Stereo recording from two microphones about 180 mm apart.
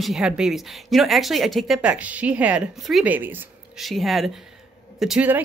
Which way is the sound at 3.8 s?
Centre (ahead or behind).